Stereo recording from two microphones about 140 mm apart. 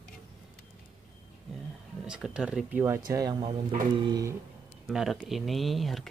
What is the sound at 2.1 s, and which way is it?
Speech, 5° right (ahead or behind).